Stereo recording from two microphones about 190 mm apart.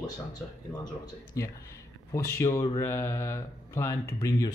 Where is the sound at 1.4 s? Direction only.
15° left (ahead or behind).